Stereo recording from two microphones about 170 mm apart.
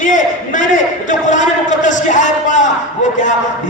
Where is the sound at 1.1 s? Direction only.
45° left (ahead or behind).